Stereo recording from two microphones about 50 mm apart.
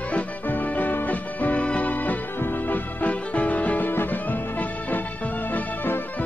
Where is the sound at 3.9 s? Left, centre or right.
Left.